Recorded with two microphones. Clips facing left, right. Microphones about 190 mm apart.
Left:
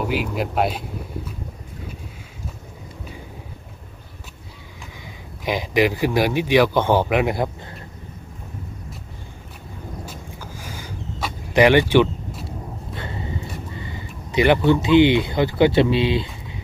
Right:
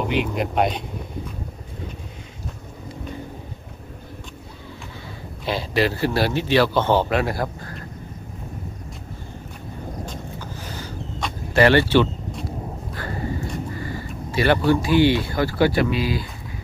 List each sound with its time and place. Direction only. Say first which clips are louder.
0.1 s speech: right 1 dB; 5° left (ahead or behind)
5.4 s speech: left 2 dB; 15° left (ahead or behind)
10.0 s vehicle: right 3 dB; 10° left (ahead or behind)
11.5 s speech: left 2 dB; 15° left (ahead or behind)
12.4 s a sound: right 2 dB; 25° left (ahead or behind)
13.7 s speech: right 4 dB; 20° left (ahead or behind)